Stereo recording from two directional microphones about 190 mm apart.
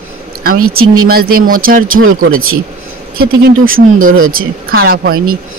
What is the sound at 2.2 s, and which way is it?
Speech, 90° right.